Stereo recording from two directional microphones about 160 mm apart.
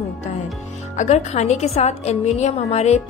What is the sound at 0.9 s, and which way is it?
A woman's voice, 50° left (ahead or behind).